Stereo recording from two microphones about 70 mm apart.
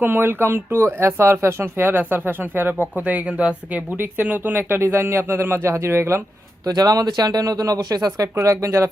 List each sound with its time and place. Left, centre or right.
0.0 s speech: right
6.7 s a man's voice: right
8.4 s speech: right